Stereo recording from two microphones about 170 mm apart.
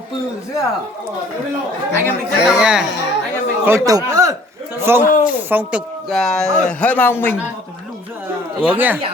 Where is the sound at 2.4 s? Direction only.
5° right (ahead or behind).